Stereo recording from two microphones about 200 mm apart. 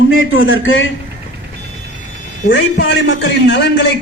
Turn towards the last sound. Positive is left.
turn(degrees=65)  # may be behind; listen again after turning